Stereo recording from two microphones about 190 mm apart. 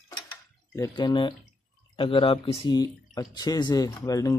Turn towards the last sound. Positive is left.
turn(degrees=20)  # may be behind; listen again after turning